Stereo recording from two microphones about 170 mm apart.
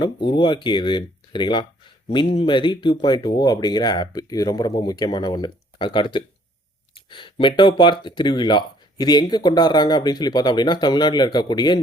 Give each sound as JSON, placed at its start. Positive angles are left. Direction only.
{"t": 0.0, "sound": "speech", "side_deg": 25}